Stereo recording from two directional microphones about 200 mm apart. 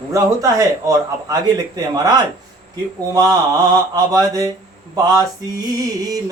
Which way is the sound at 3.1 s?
20° right (ahead or behind).